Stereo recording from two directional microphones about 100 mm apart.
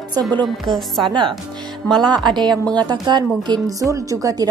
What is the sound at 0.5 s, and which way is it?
Music, centre (ahead or behind).